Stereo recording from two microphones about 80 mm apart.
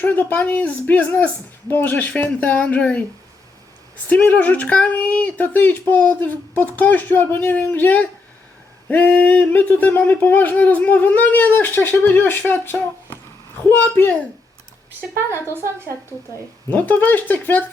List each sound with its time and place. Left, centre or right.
0.0 s speech: left
4.1 s speech: centre
15.3 s speech: right
16.6 s speech: left